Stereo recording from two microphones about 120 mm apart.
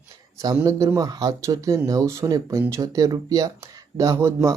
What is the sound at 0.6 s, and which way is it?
Speech, 30° right (ahead or behind).